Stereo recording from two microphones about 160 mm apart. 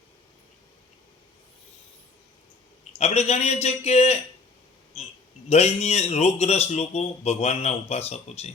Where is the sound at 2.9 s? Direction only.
40° left (ahead or behind).